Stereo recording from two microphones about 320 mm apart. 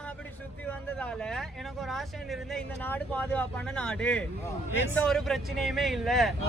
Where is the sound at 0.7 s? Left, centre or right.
Centre.